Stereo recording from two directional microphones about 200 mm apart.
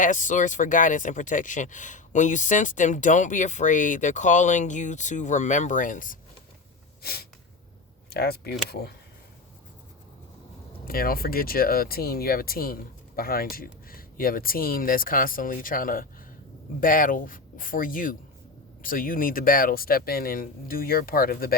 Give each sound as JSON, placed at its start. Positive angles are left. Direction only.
{"t": 0.0, "sound": "speech", "side_deg": 40}
{"t": 7.0, "sound": "snort", "side_deg": 50}
{"t": 8.1, "sound": "speech", "side_deg": 50}
{"t": 10.8, "sound": "speech", "side_deg": 45}